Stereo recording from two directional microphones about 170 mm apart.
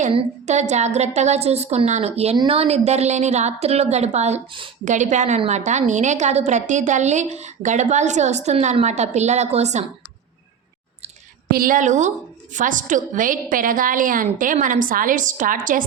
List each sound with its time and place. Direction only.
0.1 s a woman's voice: 40° right (ahead or behind)
4.9 s a woman's voice: 45° right (ahead or behind)
11.5 s a woman's voice: 55° right (ahead or behind)